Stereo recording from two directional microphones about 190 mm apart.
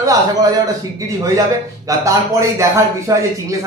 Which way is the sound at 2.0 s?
15° right (ahead or behind).